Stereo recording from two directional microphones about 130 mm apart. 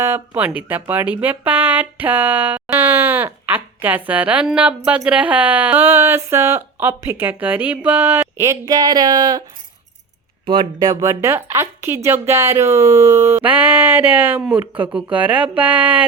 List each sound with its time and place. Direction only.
0.0 s speech: 20° right (ahead or behind)
10.4 s a woman's voice: 35° right (ahead or behind); by 16.0 s 10° right (ahead or behind)